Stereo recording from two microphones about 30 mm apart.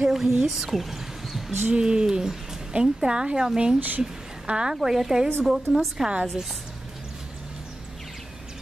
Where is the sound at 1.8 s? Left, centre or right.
Right.